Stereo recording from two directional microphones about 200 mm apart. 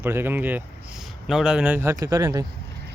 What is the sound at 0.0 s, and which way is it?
A man's voice, 10° right (ahead or behind).